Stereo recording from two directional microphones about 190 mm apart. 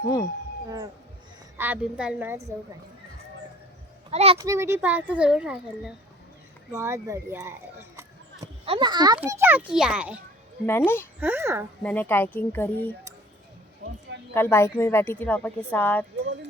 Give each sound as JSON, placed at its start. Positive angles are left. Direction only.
{"t": 1.5, "sound": "a child's voice", "side_deg": -10}
{"t": 4.1, "sound": "a child's voice", "side_deg": -35}
{"t": 4.4, "sound": "a child's voice", "side_deg": -15}
{"t": 6.7, "sound": "speech", "side_deg": -15}
{"t": 8.6, "sound": "a child's voice", "side_deg": -25}
{"t": 9.1, "sound": "a child's voice", "side_deg": -10}
{"t": 10.7, "sound": "a woman's voice", "side_deg": 10}
{"t": 11.2, "sound": "a child's voice", "side_deg": -10}
{"t": 11.8, "sound": "a woman's voice", "side_deg": 10}
{"t": 14.3, "sound": "a woman's voice", "side_deg": 10}